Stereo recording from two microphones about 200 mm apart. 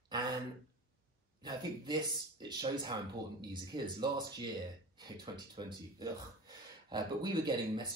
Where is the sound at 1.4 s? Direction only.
20° right (ahead or behind).